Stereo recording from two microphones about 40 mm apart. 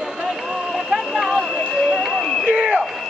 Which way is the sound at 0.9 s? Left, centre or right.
Centre.